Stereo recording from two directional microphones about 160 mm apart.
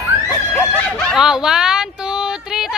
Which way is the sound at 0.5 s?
10° left (ahead or behind).